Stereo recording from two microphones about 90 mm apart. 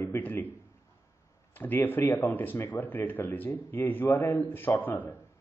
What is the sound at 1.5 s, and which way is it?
A man's voice, 20° left (ahead or behind).